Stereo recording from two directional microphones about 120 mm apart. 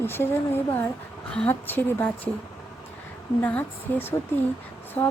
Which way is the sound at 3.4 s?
15° left (ahead or behind).